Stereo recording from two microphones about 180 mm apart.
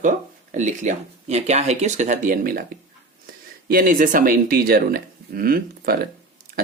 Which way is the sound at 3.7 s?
50° right (ahead or behind).